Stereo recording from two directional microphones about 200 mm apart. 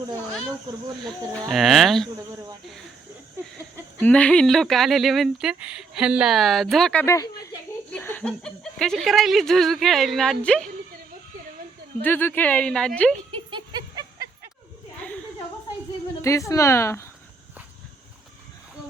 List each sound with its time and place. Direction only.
1.0 s speech: centre (ahead or behind)
4.0 s speech: 5° left (ahead or behind)
7.0 s speech: 15° left (ahead or behind)
12.0 s speech: 10° left (ahead or behind)
13.3 s a sound: 25° right (ahead or behind)
16.2 s speech: 15° left (ahead or behind)